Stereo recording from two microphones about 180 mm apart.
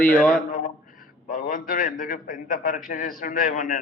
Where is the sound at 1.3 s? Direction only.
50° left (ahead or behind).